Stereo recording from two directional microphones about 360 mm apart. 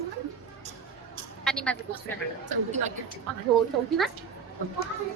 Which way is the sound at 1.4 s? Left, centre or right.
Centre.